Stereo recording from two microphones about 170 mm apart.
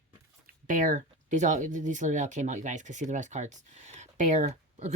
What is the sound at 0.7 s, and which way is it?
Speech, 50° right (ahead or behind).